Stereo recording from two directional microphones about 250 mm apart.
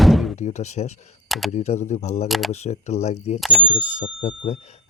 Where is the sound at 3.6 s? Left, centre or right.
Left.